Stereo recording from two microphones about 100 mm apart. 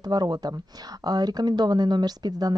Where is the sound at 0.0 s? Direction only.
45° right (ahead or behind).